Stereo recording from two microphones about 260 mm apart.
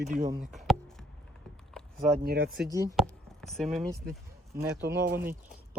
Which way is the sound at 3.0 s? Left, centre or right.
Centre.